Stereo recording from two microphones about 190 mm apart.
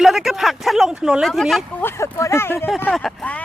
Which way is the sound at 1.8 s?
15° left (ahead or behind).